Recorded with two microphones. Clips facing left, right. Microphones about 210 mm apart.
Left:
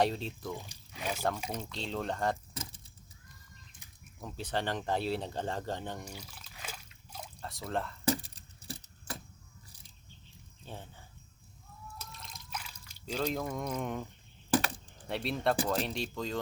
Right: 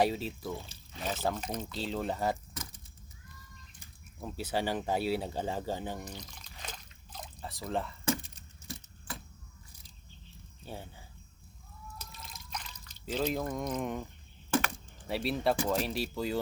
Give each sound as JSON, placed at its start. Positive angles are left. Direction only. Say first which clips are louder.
{"t": 0.0, "sound": "speech", "louder": "right 1 dB", "side_deg": -5}
{"t": 0.5, "sound": "pour", "louder": "right 1 dB", "side_deg": 15}
{"t": 1.4, "sound": "speech", "louder": "right 1 dB", "side_deg": 10}
{"t": 1.6, "sound": "speech", "louder": "right 2 dB", "side_deg": -5}
{"t": 2.5, "sound": "keys jangling", "louder": "left 1 dB", "side_deg": 30}
{"t": 4.2, "sound": "speech", "louder": "right 2 dB", "side_deg": -5}
{"t": 6.1, "sound": "a sound", "louder": "right 2 dB", "side_deg": 10}
{"t": 8.0, "sound": "keys jangling", "louder": "left 1 dB", "side_deg": 35}
{"t": 10.7, "sound": "speech", "louder": "right 3 dB", "side_deg": -10}
{"t": 11.9, "sound": "trickle", "louder": "even", "side_deg": 0}
{"t": 13.2, "sound": "speech", "louder": "right 1 dB", "side_deg": -5}